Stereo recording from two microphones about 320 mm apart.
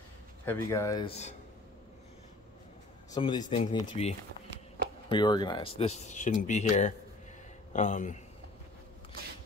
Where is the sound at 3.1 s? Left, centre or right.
Centre.